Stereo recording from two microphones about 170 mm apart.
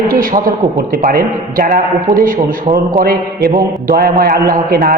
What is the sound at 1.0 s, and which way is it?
A man's voice, 60° right (ahead or behind).